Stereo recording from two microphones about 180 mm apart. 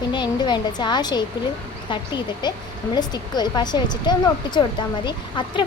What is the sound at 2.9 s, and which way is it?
A woman's voice, 25° left (ahead or behind).